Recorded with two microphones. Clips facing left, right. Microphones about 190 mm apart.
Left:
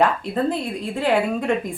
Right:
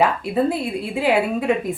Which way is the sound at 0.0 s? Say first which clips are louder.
Right 1 dB; 5° right (ahead or behind).